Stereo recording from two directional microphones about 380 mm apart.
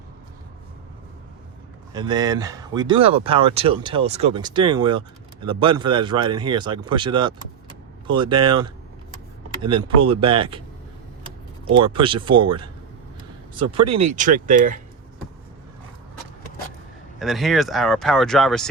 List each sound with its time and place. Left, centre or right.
1.9 s speech: centre
11.7 s speech: centre
17.2 s speech: centre